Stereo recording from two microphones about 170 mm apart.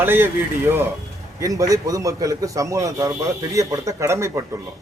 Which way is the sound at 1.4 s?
20° right (ahead or behind).